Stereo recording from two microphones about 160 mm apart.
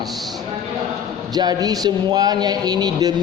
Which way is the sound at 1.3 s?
25° right (ahead or behind).